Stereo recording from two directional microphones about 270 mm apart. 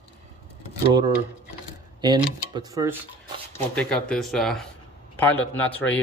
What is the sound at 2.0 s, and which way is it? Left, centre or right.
Speech, centre.